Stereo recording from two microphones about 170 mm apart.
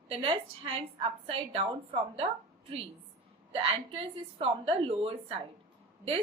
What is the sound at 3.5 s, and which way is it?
A woman's voice, 35° right (ahead or behind).